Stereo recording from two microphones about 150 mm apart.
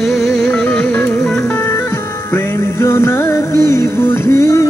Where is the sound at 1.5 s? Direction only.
15° left (ahead or behind).